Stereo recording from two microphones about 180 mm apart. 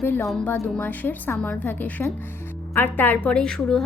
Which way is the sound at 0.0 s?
10° left (ahead or behind).